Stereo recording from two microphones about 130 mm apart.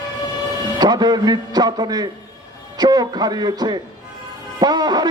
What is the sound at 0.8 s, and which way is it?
A man's voice, 30° right (ahead or behind).